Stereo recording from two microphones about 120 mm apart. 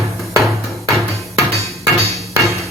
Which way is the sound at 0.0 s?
Centre (ahead or behind).